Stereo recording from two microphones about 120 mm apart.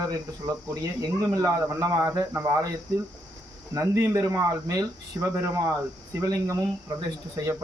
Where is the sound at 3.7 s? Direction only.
25° right (ahead or behind).